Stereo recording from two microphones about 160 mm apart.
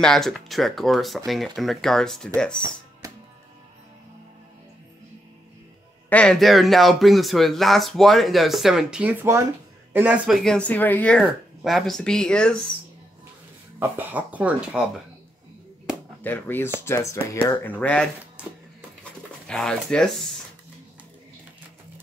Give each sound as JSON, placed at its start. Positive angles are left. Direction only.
{"t": 0.0, "sound": "speech", "side_deg": 5}
{"t": 3.0, "sound": "music", "side_deg": -20}
{"t": 6.0, "sound": "speech", "side_deg": 5}
{"t": 13.7, "sound": "speech", "side_deg": -10}
{"t": 16.2, "sound": "speech", "side_deg": 10}
{"t": 19.4, "sound": "speech", "side_deg": 5}